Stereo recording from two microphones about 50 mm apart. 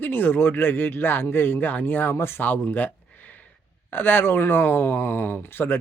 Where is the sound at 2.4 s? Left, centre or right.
Left.